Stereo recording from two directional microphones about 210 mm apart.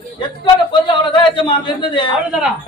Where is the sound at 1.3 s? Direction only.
25° left (ahead or behind).